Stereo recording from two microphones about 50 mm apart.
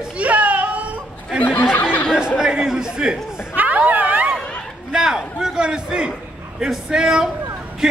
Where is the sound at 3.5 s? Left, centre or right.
Right.